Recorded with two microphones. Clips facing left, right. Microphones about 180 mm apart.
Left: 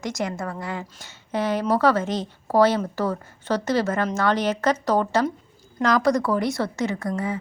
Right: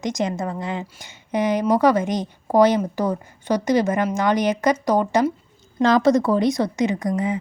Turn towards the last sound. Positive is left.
turn(degrees=-20)  # may be behind; listen again after turning